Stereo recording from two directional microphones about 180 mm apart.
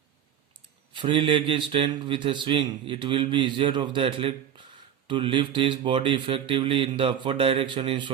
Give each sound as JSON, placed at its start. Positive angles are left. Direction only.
{"t": 0.9, "sound": "speech", "side_deg": -30}